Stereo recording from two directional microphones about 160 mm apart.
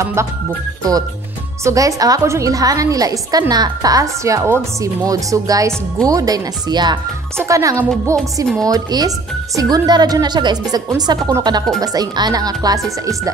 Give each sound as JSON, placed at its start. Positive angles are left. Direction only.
{"t": 0.0, "sound": "music", "side_deg": -15}
{"t": 1.6, "sound": "a woman's voice", "side_deg": -20}